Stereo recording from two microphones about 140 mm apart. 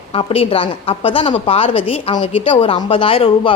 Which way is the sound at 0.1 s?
40° left (ahead or behind).